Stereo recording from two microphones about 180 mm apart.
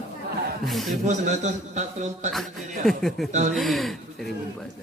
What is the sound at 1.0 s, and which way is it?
A man's voice, 40° right (ahead or behind).